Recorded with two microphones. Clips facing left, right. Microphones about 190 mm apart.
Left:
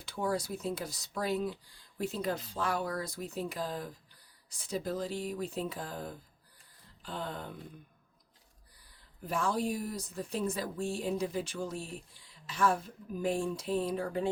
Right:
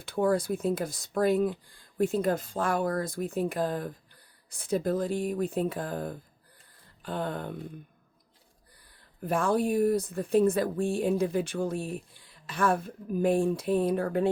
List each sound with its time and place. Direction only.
0.0 s speech: 55° right (ahead or behind)
9.2 s speech: 55° right (ahead or behind)